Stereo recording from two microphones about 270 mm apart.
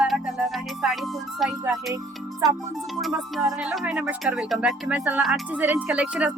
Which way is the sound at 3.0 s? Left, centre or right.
Centre.